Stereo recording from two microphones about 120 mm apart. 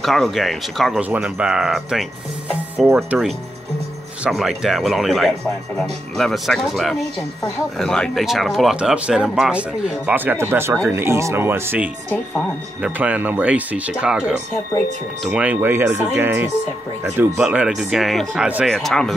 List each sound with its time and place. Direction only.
0.0 s speech: centre (ahead or behind)
3.1 s speech: centre (ahead or behind); by 16.5 s 20° right (ahead or behind)
17.2 s speech: 10° right (ahead or behind)